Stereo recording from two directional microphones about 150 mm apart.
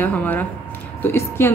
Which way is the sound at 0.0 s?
10° left (ahead or behind).